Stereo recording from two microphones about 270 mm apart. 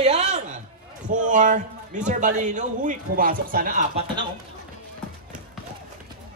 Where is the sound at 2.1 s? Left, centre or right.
Right.